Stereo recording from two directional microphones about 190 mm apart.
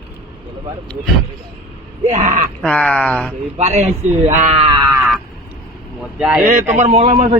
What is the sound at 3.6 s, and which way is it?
Speech, 35° right (ahead or behind).